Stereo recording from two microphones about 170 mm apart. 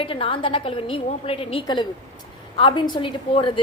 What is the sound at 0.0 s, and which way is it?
A woman's voice, 30° left (ahead or behind).